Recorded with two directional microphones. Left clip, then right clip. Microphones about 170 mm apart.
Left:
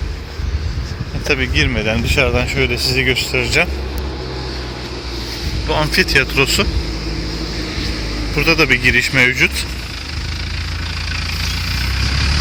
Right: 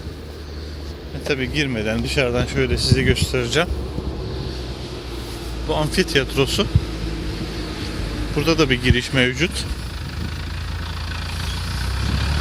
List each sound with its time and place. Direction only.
1.3 s speech: 15° right (ahead or behind); by 3.7 s 40° right (ahead or behind)
5.6 s speech: 25° right (ahead or behind)
7.6 s vehicle: 50° right (ahead or behind)
8.4 s speech: 30° right (ahead or behind)
11.1 s vehicle: 50° right (ahead or behind)